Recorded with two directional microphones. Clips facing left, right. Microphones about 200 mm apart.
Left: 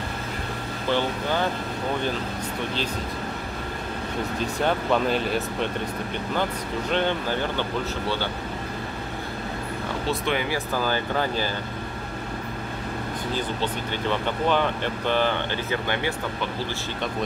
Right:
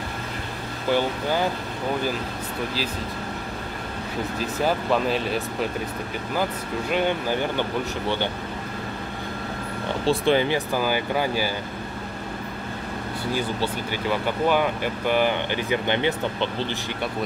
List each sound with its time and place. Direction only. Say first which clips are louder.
0.8 s speech: right 2 dB; 10° right (ahead or behind)
4.4 s speech: right 1 dB; 5° right (ahead or behind)
6.9 s speech: right 1 dB; 10° right (ahead or behind)
10.0 s speech: right 7 dB; 30° right (ahead or behind)
10.7 s speech: right 2 dB; 10° right (ahead or behind)
13.3 s speech: right 3 dB; 10° right (ahead or behind)